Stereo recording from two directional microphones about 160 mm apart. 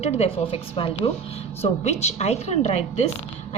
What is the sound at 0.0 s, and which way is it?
A woman's voice, 40° left (ahead or behind).